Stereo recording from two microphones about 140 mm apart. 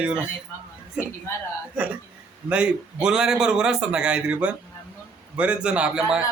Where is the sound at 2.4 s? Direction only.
10° right (ahead or behind).